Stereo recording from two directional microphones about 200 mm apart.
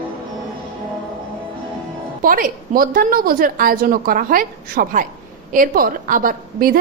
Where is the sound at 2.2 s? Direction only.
45° right (ahead or behind).